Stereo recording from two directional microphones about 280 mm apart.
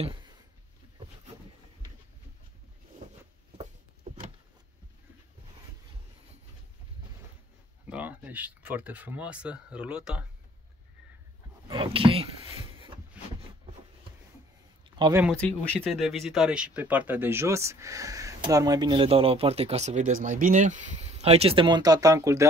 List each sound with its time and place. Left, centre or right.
0.0 s a sound: centre
7.8 s speech: centre
11.6 s speech: centre
13.2 s a sound: centre
15.0 s speech: centre
15.2 s speech: centre